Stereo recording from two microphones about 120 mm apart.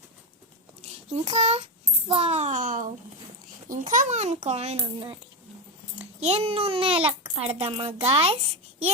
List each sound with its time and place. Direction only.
1.1 s a child's voice: 65° right (ahead or behind)
6.0 s a child's voice: 60° right (ahead or behind)